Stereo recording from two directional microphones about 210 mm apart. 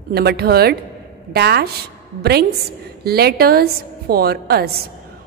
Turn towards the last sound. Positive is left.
turn(degrees=-45)  # may be behind; listen again after turning